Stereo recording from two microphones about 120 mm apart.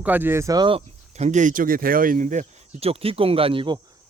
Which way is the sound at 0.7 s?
70° right (ahead or behind).